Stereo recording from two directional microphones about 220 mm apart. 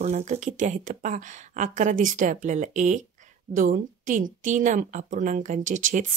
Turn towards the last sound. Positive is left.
turn(degrees=-35)  # may be behind; listen again after turning